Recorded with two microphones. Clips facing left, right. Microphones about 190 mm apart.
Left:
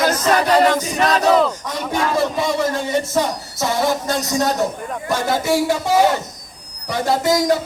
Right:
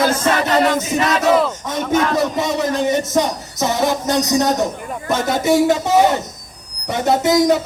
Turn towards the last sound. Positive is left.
turn(degrees=-20)  # may be behind; listen again after turning